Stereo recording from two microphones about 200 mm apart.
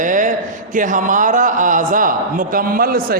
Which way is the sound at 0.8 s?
40° right (ahead or behind).